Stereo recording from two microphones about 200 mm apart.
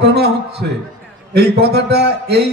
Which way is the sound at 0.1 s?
55° right (ahead or behind).